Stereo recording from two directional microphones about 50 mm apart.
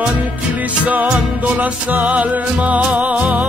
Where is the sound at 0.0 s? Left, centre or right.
Right.